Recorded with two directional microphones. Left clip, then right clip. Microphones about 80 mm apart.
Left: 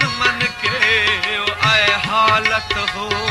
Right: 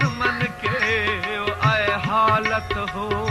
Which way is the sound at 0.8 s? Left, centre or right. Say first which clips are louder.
Left 7 dB; left.